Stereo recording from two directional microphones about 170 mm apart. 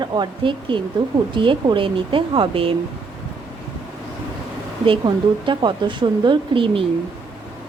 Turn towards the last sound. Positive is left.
turn(degrees=-30)  # may be behind; listen again after turning